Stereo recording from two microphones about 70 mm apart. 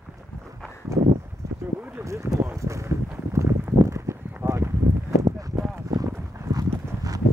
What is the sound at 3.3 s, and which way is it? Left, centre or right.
Clip-clop, right.